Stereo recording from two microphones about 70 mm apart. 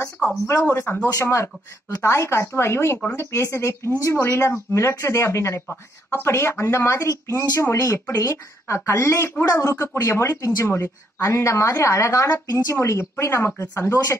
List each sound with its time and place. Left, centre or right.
0.6 s speech: left